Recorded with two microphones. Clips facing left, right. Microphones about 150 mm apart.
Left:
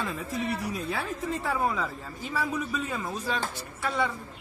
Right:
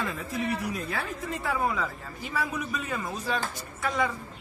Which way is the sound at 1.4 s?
Centre (ahead or behind).